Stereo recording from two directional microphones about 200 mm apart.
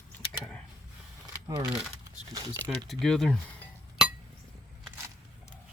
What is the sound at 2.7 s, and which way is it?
Cutlery, centre (ahead or behind).